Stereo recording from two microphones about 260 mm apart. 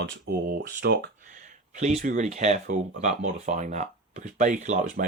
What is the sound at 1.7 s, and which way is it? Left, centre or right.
Speech, right.